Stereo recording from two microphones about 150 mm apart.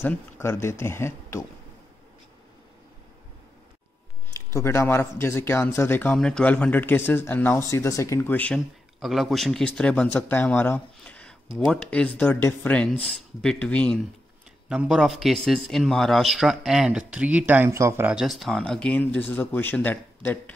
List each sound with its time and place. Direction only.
0.0 s speech: 15° left (ahead or behind)
4.5 s speech: 20° left (ahead or behind)
8.5 s speech: centre (ahead or behind)
14.7 s a man's voice: 5° right (ahead or behind)
18.1 s speech: centre (ahead or behind)